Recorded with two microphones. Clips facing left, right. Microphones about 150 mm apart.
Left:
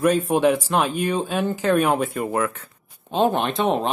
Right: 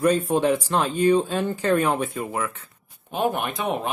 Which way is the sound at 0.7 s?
10° left (ahead or behind).